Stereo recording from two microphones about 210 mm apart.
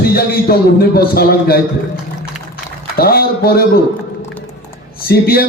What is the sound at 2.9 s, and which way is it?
Speech, 45° left (ahead or behind).